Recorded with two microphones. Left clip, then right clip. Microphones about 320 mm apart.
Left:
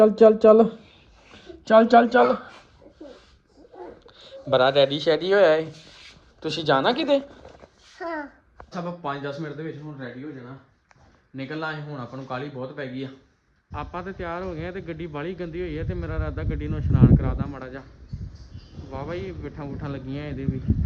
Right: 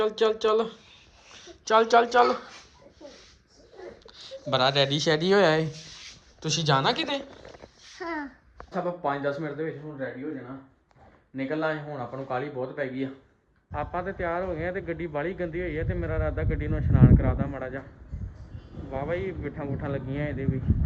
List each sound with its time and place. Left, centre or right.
0.0 s speech: centre
4.0 s speech: centre
8.7 s speech: centre
11.3 s speech: centre
18.9 s speech: centre